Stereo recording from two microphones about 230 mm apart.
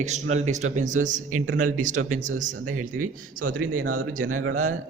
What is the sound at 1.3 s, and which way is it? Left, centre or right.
Speech, right.